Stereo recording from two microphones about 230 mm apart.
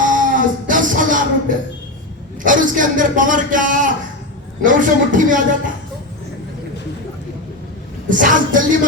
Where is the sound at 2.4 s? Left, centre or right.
Right.